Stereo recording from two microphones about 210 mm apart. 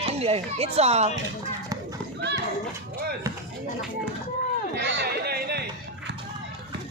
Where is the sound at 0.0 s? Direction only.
30° right (ahead or behind).